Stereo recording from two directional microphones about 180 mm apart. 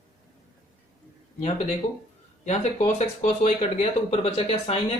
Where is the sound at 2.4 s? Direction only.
35° left (ahead or behind).